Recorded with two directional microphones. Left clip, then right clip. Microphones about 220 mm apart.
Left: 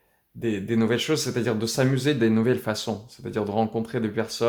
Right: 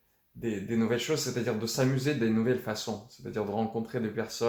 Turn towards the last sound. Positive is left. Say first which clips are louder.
# left 6 dB
turn(degrees=45)  # may be behind; listen again after turning